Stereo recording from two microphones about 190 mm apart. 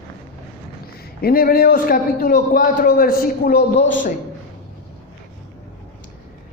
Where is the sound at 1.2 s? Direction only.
50° left (ahead or behind).